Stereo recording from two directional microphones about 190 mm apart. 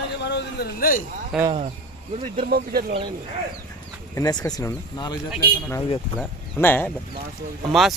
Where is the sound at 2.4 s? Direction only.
50° right (ahead or behind).